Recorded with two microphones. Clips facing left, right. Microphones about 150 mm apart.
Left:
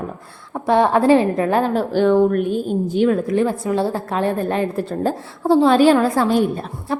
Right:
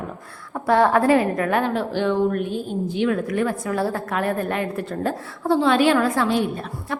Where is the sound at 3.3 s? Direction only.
25° left (ahead or behind).